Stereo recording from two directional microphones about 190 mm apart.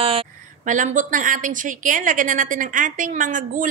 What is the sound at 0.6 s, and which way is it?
A woman's voice, 40° right (ahead or behind).